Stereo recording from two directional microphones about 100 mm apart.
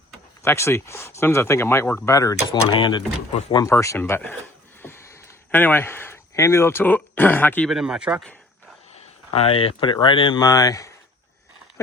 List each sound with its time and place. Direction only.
0.4 s speech: 25° left (ahead or behind)
2.0 s speech: 35° left (ahead or behind)
2.5 s speech: 55° left (ahead or behind)
3.5 s speech: 35° left (ahead or behind)
4.8 s a sound: 25° left (ahead or behind)
7.7 s speech: 5° right (ahead or behind)
9.3 s speech: 75° left (ahead or behind); by 10.9 s 35° left (ahead or behind)